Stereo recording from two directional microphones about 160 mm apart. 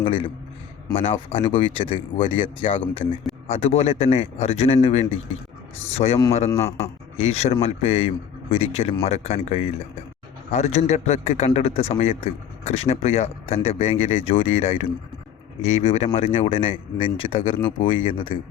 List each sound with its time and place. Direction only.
0.0 s a man's voice: 35° left (ahead or behind)
6.5 s a man's voice: 15° left (ahead or behind)
7.2 s a man's voice: 40° left (ahead or behind)